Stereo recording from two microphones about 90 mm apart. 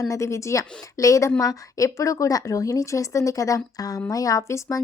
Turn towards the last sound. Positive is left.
turn(degrees=35)  # may be behind; listen again after turning